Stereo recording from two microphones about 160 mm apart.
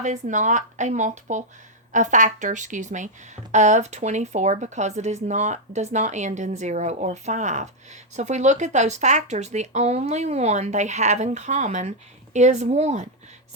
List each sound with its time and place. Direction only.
0.0 s speech: 50° right (ahead or behind)